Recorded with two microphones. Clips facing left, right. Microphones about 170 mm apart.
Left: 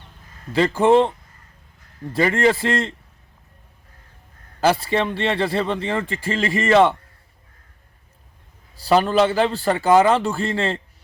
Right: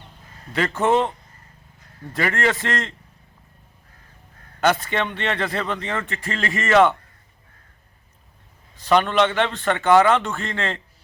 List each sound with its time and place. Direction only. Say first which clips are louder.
0.5 s a man's voice: left 5 dB; 30° left (ahead or behind)
4.6 s a man's voice: left 2 dB; 30° left (ahead or behind)
6.3 s speech: left 5 dB; centre (ahead or behind)
6.7 s a man's voice: left 1 dB; 30° left (ahead or behind)
8.7 s a man's voice: left 2 dB; 35° left (ahead or behind)